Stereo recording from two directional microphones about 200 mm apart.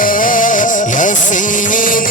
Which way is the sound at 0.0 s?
45° left (ahead or behind).